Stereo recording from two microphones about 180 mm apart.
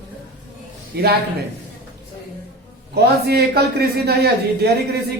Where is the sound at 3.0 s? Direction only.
60° right (ahead or behind).